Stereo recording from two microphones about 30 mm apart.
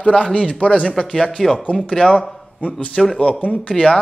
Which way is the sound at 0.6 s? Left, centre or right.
Left.